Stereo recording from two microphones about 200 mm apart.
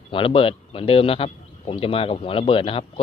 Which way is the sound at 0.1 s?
25° left (ahead or behind).